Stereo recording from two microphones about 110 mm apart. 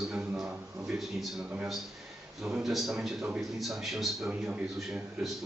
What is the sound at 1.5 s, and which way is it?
A man's voice, 5° right (ahead or behind).